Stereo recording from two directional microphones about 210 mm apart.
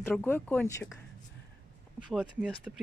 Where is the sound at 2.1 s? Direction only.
Centre (ahead or behind).